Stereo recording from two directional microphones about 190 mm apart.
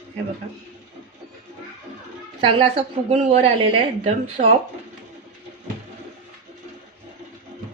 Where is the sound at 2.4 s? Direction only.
30° right (ahead or behind).